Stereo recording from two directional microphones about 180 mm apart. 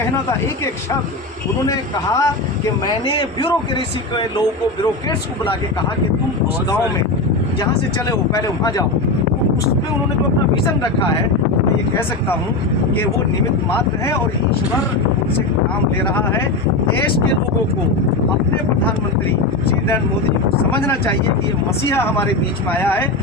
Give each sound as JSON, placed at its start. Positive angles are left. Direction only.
{"t": 1.6, "sound": "a man's voice", "side_deg": 20}
{"t": 8.3, "sound": "a man's voice", "side_deg": 20}
{"t": 22.8, "sound": "speech", "side_deg": 10}